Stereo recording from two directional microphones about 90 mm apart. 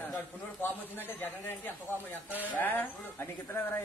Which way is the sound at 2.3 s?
20° left (ahead or behind).